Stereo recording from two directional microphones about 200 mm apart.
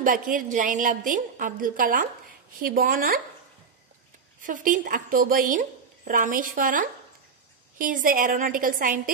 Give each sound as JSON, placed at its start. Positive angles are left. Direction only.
{"t": 0.0, "sound": "a woman's voice", "side_deg": -40}
{"t": 4.4, "sound": "a woman's voice", "side_deg": -40}